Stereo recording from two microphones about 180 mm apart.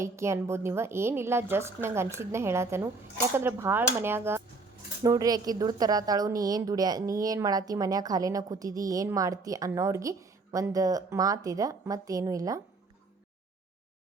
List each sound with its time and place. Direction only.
0.0 s a woman's voice: 15° right (ahead or behind)